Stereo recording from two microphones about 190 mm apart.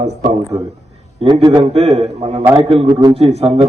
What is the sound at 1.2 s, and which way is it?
Speech, 25° right (ahead or behind).